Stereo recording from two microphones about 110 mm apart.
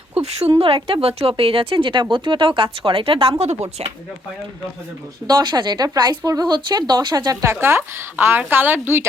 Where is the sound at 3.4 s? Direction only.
75° right (ahead or behind).